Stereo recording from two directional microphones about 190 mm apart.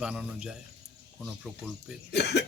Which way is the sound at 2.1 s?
60° left (ahead or behind).